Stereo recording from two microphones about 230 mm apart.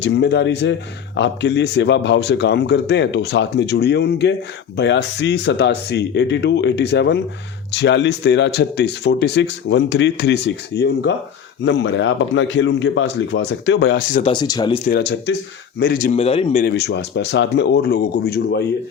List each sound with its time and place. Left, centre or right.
0.0 s speech: left
14.1 s speech: left
14.8 s a man's voice: left
16.6 s speech: left